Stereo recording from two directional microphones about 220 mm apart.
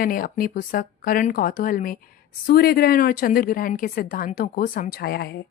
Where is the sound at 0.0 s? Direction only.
40° left (ahead or behind).